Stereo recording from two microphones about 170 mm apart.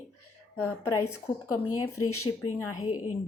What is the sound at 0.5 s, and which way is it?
A woman's voice, 15° left (ahead or behind).